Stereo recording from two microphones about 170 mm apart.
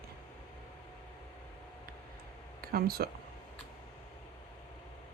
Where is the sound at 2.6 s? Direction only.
65° right (ahead or behind).